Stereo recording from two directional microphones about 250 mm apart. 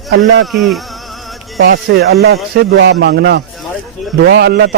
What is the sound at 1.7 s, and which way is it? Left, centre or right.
A man's voice, right.